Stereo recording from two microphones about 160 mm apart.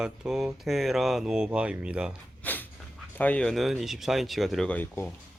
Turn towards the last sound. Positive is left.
turn(degrees=10)  # may be behind; listen again after turning